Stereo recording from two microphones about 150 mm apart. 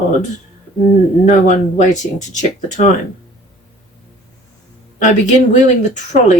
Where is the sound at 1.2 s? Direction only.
50° left (ahead or behind).